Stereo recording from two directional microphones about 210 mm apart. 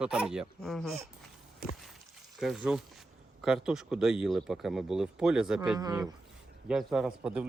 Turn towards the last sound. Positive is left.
turn(degrees=-5)  # may be behind; listen again after turning